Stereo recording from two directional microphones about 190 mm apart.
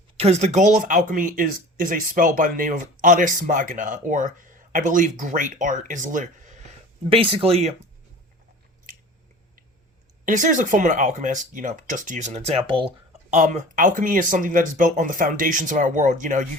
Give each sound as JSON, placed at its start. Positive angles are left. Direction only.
{"t": 0.2, "sound": "speech", "side_deg": -35}
{"t": 7.0, "sound": "speech", "side_deg": -30}
{"t": 10.2, "sound": "speech", "side_deg": -40}
{"t": 13.3, "sound": "speech", "side_deg": -40}